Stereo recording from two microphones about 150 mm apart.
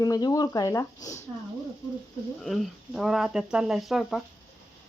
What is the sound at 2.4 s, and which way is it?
Speech, centre (ahead or behind).